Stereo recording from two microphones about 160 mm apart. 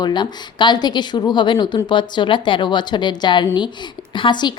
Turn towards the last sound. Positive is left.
turn(degrees=30)  # may be behind; listen again after turning